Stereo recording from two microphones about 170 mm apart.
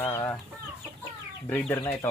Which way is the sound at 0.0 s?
15° left (ahead or behind).